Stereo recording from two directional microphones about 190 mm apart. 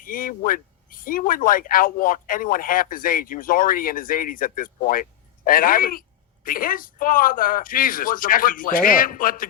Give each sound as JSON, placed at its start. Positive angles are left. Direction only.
{"t": 0.0, "sound": "speech", "side_deg": 45}